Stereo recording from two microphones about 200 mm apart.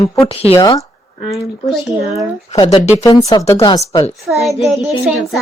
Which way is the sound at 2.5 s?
25° left (ahead or behind).